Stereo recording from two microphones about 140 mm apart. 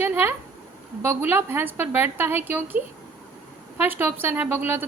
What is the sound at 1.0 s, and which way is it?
A woman's voice, 15° right (ahead or behind).